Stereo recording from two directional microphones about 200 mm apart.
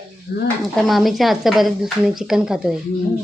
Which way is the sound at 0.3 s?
50° left (ahead or behind).